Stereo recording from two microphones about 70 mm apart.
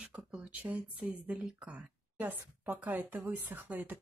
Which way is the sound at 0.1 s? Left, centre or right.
Right.